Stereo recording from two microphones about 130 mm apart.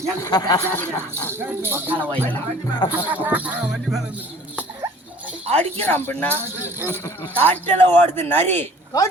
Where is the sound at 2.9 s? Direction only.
15° right (ahead or behind).